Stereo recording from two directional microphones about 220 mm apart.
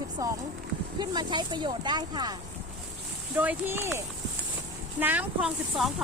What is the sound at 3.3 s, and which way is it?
Speech, 10° right (ahead or behind).